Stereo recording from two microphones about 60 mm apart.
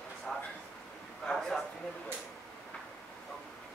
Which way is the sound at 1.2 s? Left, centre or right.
Centre.